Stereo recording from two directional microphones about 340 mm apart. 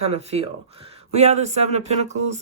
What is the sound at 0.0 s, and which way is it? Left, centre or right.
Speech, centre.